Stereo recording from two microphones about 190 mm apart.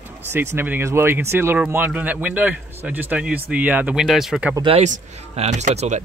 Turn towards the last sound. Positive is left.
turn(degrees=-35)  # may be behind; listen again after turning